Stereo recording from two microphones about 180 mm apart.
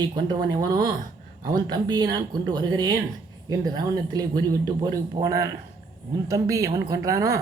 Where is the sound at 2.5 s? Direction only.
25° right (ahead or behind).